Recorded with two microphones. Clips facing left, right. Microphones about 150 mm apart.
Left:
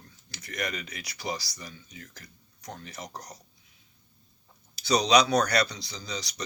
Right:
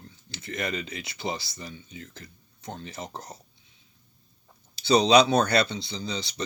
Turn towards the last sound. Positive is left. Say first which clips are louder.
# right 4 dB
turn(degrees=-30)  # may be behind; listen again after turning